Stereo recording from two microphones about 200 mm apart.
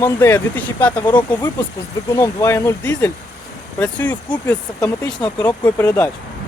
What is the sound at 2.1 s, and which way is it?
Speech, 15° left (ahead or behind).